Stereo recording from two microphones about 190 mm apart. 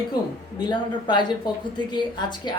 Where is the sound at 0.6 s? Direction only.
25° left (ahead or behind).